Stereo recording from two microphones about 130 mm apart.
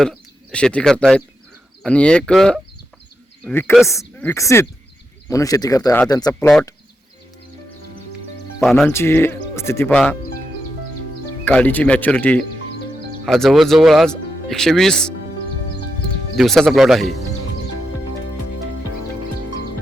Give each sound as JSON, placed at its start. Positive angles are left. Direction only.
{"t": 0.0, "sound": "speech", "side_deg": 5}
{"t": 8.9, "sound": "speech", "side_deg": 20}
{"t": 11.4, "sound": "speech", "side_deg": 15}
{"t": 16.3, "sound": "speech", "side_deg": 0}